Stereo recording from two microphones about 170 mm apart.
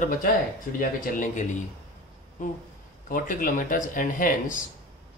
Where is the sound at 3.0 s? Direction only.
50° left (ahead or behind).